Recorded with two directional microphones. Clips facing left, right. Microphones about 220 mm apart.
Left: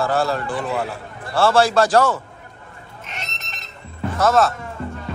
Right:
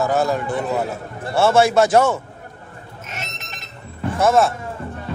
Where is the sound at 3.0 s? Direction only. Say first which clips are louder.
Right 2 dB; 45° right (ahead or behind).